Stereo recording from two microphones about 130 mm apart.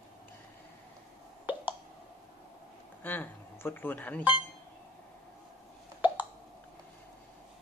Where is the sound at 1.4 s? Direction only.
15° right (ahead or behind).